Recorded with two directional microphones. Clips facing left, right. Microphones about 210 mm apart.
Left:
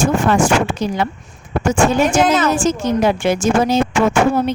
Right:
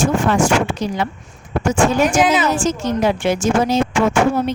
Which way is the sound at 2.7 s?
50° left (ahead or behind).